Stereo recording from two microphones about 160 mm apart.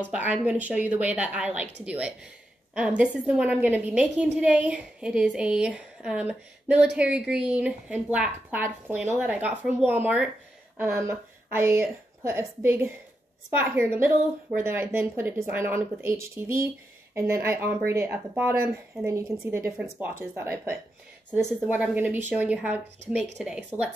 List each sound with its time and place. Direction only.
0.1 s a woman's voice: 10° right (ahead or behind)